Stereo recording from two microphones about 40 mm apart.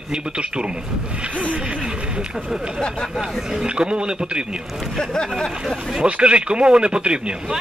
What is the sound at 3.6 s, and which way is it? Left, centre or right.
Speech, right.